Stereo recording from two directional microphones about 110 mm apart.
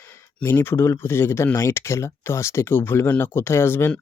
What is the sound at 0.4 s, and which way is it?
Speech, 20° left (ahead or behind).